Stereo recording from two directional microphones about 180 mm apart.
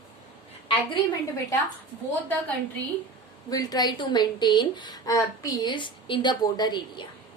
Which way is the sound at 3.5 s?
20° left (ahead or behind).